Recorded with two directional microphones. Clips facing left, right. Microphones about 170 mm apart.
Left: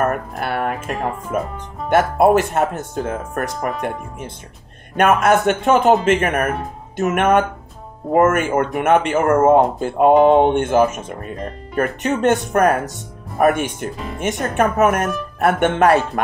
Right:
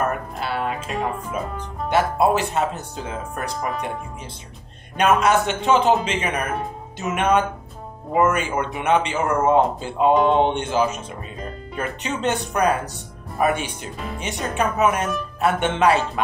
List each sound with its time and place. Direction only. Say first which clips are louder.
0.0 s speech: left 4 dB; 55° left (ahead or behind)
4.9 s speech: left 3 dB; 55° left (ahead or behind)